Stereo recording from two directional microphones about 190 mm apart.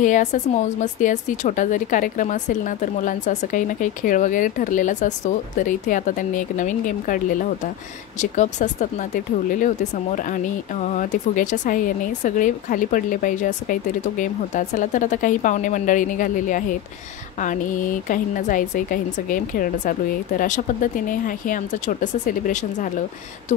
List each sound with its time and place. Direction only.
0.0 s a woman's voice: 40° left (ahead or behind)